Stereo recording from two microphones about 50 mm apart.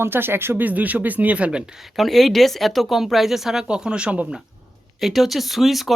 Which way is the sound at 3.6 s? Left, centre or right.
Centre.